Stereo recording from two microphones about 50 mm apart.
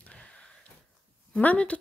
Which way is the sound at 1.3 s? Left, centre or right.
Left.